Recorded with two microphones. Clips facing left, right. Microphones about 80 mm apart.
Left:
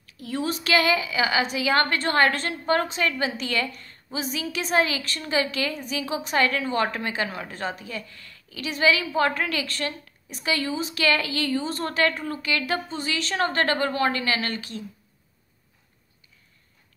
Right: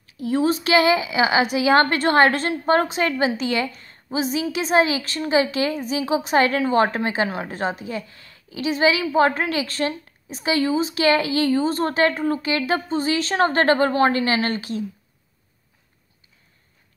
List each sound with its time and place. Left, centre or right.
0.0 s a woman's voice: right
3.8 s a sound: right
4.4 s a woman's voice: right